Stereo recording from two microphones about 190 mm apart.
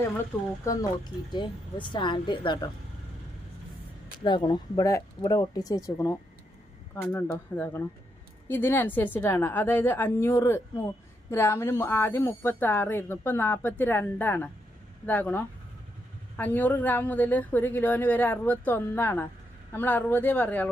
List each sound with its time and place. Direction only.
0.8 s speech: 20° left (ahead or behind)
4.2 s a woman's voice: 25° left (ahead or behind); by 20.7 s 10° left (ahead or behind)